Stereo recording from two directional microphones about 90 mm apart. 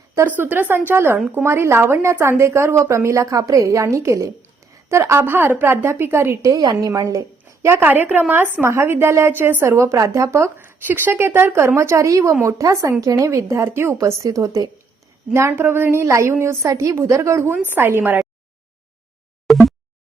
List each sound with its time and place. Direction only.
0.2 s a woman's voice: 20° right (ahead or behind)
10.6 s a woman's voice: 25° right (ahead or behind); by 14.7 s 40° right (ahead or behind)
15.4 s a woman's voice: 30° right (ahead or behind)